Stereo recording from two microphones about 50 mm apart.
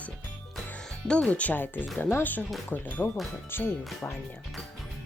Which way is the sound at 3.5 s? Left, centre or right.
Left.